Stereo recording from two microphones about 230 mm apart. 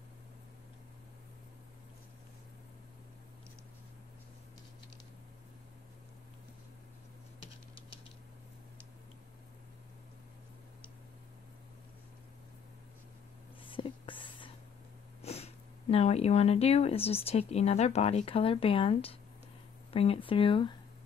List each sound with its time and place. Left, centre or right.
13.7 s whispering: left
15.2 s speech: left